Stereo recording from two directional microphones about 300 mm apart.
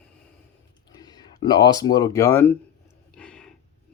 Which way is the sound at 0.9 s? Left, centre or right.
Centre.